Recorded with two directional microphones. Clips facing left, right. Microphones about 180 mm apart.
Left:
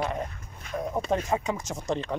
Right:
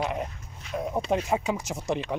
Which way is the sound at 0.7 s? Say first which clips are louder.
Right 1 dB; 50° left (ahead or behind).